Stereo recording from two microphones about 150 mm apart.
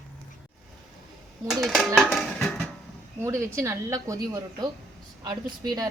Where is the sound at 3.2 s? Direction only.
20° right (ahead or behind).